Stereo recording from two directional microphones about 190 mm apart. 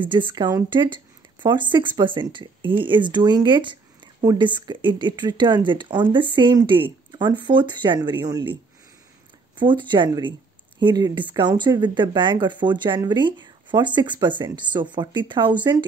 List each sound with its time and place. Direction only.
0.0 s speech: 25° right (ahead or behind)
9.6 s speech: 25° right (ahead or behind)